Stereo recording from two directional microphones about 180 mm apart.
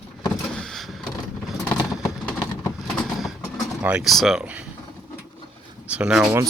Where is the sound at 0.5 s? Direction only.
Centre (ahead or behind).